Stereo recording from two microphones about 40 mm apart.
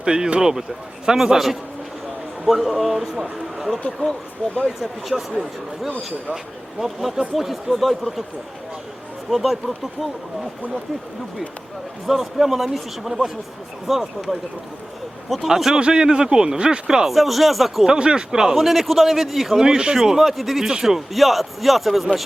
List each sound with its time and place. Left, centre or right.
0.0 s speech: centre
4.8 s speech: centre
9.3 s speech: centre
12.0 s speech: centre
15.4 s speech: centre
17.1 s speech: centre
17.8 s speech: right
18.5 s speech: centre
19.5 s speech: centre
20.0 s speech: centre